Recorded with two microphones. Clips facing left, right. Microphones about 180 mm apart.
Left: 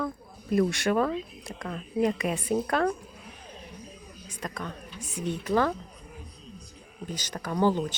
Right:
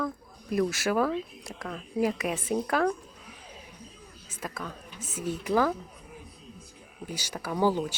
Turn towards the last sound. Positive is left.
turn(degrees=-10)  # may be behind; listen again after turning